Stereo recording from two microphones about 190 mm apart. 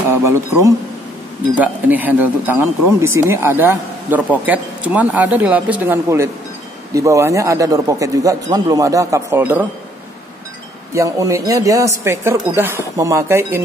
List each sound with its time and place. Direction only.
0.2 s speech: 15° right (ahead or behind)
10.9 s speech: 15° right (ahead or behind)